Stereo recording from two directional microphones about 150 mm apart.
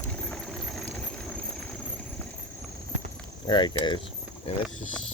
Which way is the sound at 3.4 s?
30° left (ahead or behind).